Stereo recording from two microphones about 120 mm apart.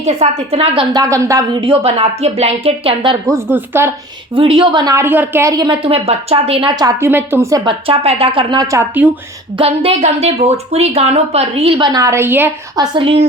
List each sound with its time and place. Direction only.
0.0 s a woman's voice: 65° right (ahead or behind)
0.9 s a woman's voice: 25° right (ahead or behind)
1.6 s a woman's voice: 55° right (ahead or behind)
3.5 s a woman's voice: 20° right (ahead or behind)
4.4 s a woman's voice: 45° right (ahead or behind)
5.0 s a woman's voice: 15° right (ahead or behind)
5.6 s a woman's voice: 50° right (ahead or behind)
7.0 s a woman's voice: 20° right (ahead or behind)
7.6 s a woman's voice: 45° right (ahead or behind)
8.5 s a woman's voice: 25° right (ahead or behind)
9.6 s a woman's voice: 55° right (ahead or behind); by 12.5 s 20° right (ahead or behind)
12.7 s a woman's voice: 35° right (ahead or behind)